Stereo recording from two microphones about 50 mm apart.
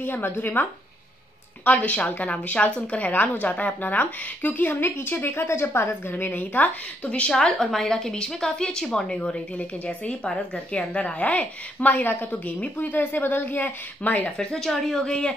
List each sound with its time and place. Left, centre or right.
0.0 s speech: left
7.3 s a woman's voice: centre; by 14.3 s left
14.3 s a woman's voice: centre